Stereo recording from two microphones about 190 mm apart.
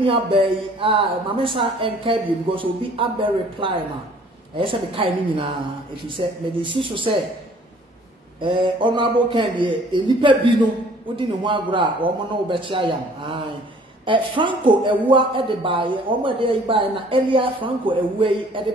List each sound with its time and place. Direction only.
0.0 s speech: 30° right (ahead or behind)
8.4 s speech: 25° right (ahead or behind)